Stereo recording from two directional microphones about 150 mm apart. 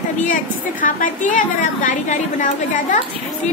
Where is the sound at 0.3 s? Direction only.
60° left (ahead or behind).